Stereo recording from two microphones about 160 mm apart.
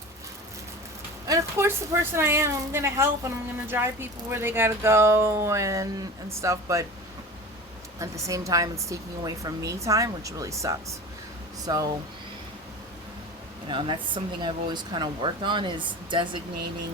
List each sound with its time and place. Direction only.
1.3 s speech: 15° right (ahead or behind)
7.9 s speech: 20° right (ahead or behind)
13.7 s speech: 30° right (ahead or behind)